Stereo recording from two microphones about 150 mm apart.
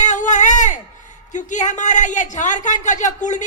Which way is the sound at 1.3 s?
55° left (ahead or behind).